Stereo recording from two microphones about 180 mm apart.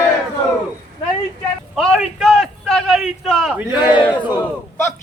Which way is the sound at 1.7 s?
Centre (ahead or behind).